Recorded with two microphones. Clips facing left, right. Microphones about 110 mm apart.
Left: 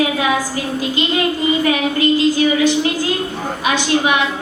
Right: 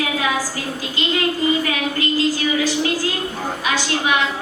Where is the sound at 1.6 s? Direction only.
20° left (ahead or behind).